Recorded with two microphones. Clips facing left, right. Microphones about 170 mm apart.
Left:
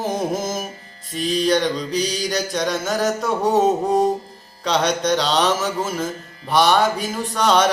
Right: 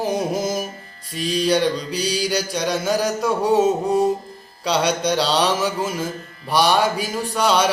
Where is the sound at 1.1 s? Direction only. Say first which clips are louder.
Left 1 dB; 45° left (ahead or behind).